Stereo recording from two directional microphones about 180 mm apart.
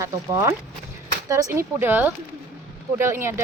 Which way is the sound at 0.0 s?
15° right (ahead or behind).